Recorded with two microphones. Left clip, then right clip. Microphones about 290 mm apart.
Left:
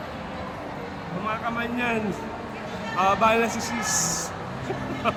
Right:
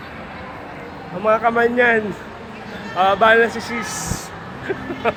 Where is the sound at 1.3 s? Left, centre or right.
Centre.